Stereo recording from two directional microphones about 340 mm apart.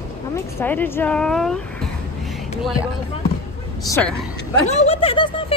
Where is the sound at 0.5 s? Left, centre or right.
Centre.